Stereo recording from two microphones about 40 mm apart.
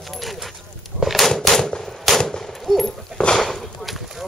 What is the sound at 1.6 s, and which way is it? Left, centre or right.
Machine gun, centre.